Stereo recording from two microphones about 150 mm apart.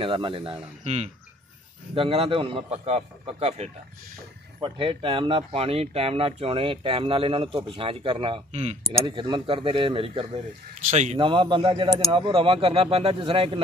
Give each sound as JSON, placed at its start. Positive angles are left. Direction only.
{"t": 0.0, "sound": "speech", "side_deg": -35}
{"t": 4.6, "sound": "speech", "side_deg": -35}
{"t": 8.5, "sound": "speech", "side_deg": -45}
{"t": 9.0, "sound": "speech", "side_deg": -35}
{"t": 11.1, "sound": "speech", "side_deg": -35}